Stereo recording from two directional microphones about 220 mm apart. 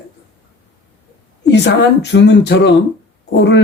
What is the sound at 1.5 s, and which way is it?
Speech, 50° left (ahead or behind).